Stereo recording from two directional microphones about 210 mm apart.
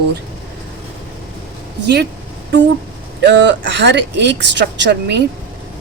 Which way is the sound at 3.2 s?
55° right (ahead or behind).